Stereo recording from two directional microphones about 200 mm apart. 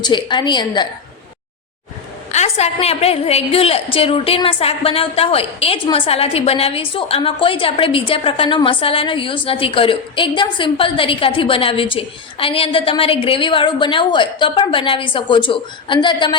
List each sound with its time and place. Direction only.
0.0 s a woman's voice: 25° left (ahead or behind)
2.3 s a woman's voice: 35° left (ahead or behind)